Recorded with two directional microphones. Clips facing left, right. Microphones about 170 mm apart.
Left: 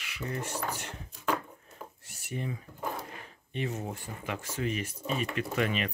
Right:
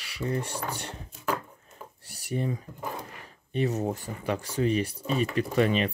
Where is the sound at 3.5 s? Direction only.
40° right (ahead or behind).